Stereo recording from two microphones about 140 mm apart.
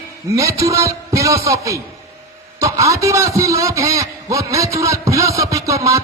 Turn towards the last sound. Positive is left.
turn(degrees=-20)  # may be behind; listen again after turning